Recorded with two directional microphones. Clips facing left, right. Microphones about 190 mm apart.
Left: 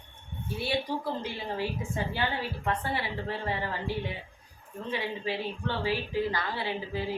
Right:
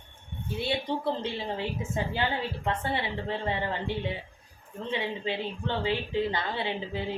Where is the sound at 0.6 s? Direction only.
25° right (ahead or behind).